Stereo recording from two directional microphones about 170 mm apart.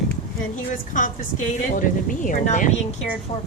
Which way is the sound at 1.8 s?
50° left (ahead or behind).